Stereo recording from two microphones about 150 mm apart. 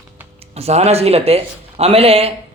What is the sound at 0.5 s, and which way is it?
Speech, 45° right (ahead or behind).